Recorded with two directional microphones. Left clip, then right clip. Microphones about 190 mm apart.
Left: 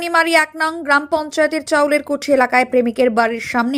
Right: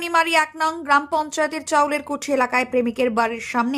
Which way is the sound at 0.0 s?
15° left (ahead or behind).